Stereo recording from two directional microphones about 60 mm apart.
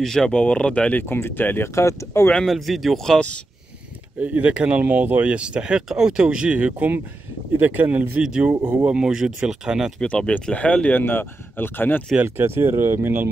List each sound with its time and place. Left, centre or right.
0.0 s speech: centre
1.0 s speech: left
1.8 s speech: left
2.5 s speech: centre
4.2 s speech: right
8.2 s speech: centre
10.0 s speech: centre
11.0 s speech: left
12.2 s speech: right